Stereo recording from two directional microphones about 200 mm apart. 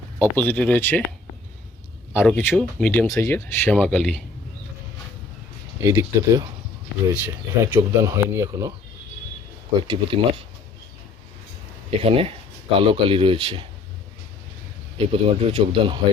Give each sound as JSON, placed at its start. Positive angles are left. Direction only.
{"t": 0.2, "sound": "speech", "side_deg": 5}
{"t": 2.1, "sound": "speech", "side_deg": 10}
{"t": 5.8, "sound": "speech", "side_deg": -15}
{"t": 9.8, "sound": "speech", "side_deg": -25}
{"t": 11.9, "sound": "speech", "side_deg": -30}
{"t": 14.9, "sound": "speech", "side_deg": -30}